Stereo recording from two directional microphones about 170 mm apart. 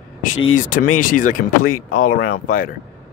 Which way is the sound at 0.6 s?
50° left (ahead or behind).